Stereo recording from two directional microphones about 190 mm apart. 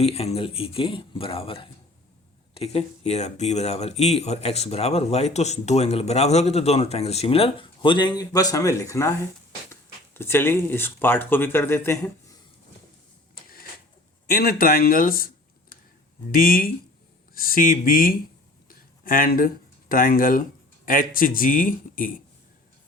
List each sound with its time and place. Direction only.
0.0 s a man's voice: 35° left (ahead or behind); by 9.1 s 15° left (ahead or behind)
10.2 s speech: 10° left (ahead or behind)
14.3 s speech: 50° left (ahead or behind)
16.3 s speech: 50° left (ahead or behind)
18.7 s a sound: 45° left (ahead or behind)
19.9 s speech: 50° left (ahead or behind)